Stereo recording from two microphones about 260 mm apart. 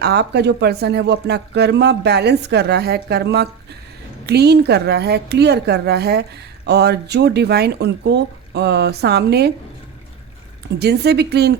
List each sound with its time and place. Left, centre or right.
0.0 s speech: right
10.8 s speech: right